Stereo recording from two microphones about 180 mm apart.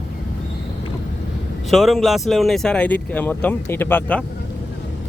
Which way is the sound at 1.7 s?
Centre (ahead or behind).